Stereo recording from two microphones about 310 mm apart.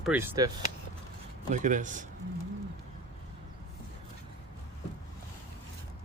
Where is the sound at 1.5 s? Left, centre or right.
Right.